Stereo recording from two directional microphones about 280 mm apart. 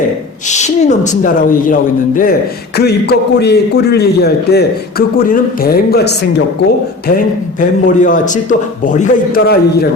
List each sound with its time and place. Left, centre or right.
0.4 s a man's voice: left
7.6 s a man's voice: left